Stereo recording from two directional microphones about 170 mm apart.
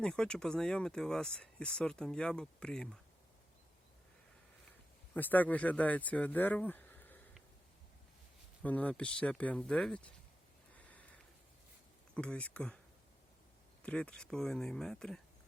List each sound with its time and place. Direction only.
0.0 s speech: 5° left (ahead or behind)
5.1 s speech: 10° left (ahead or behind)
8.6 s speech: 10° left (ahead or behind)
10.8 s a sound: 10° left (ahead or behind)
12.1 s speech: 5° left (ahead or behind)
13.8 s speech: 5° left (ahead or behind)